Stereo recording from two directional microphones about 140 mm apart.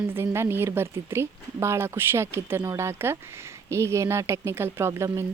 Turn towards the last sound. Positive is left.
turn(degrees=-20)  # may be behind; listen again after turning